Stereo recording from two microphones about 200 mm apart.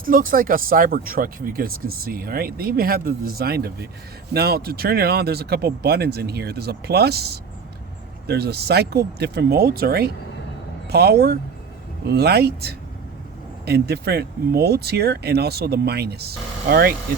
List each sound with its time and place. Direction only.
0.0 s speech: 45° right (ahead or behind)